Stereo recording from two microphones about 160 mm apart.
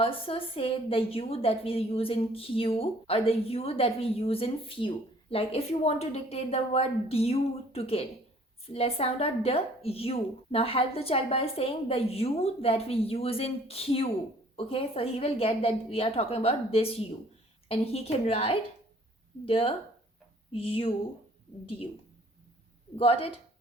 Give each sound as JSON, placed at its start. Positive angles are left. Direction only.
{"t": 0.0, "sound": "a woman's voice", "side_deg": 35}
{"t": 23.0, "sound": "a woman's voice", "side_deg": 35}